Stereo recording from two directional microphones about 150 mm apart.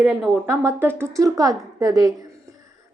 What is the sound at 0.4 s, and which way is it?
Speech, 20° right (ahead or behind).